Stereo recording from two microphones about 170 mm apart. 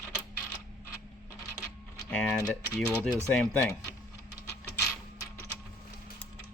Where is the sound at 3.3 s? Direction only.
5° left (ahead or behind).